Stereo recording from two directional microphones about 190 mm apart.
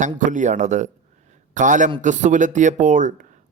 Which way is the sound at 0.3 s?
40° right (ahead or behind).